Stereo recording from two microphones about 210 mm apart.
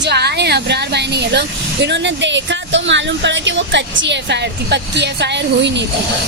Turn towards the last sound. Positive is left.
turn(degrees=-55)  # may be behind; listen again after turning